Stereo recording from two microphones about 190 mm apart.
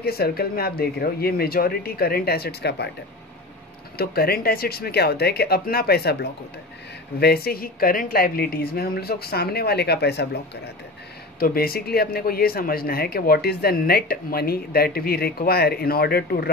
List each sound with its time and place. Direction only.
0.0 s speech: 55° left (ahead or behind)
4.0 s speech: 55° left (ahead or behind)
7.2 s speech: 55° left (ahead or behind)
11.3 s speech: 50° left (ahead or behind)